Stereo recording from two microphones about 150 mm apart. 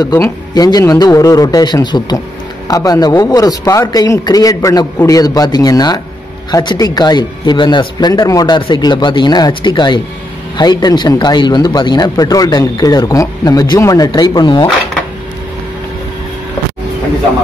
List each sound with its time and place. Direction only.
0.0 s speech: 25° left (ahead or behind)